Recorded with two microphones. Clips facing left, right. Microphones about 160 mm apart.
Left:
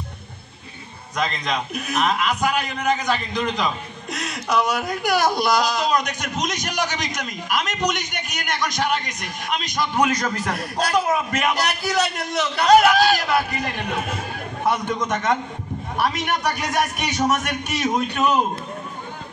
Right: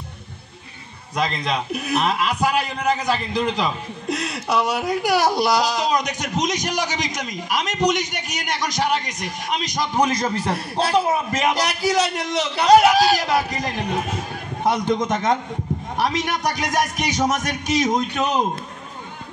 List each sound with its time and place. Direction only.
1.1 s a man's voice: 30° right (ahead or behind)
16.4 s a man's voice: 35° right (ahead or behind)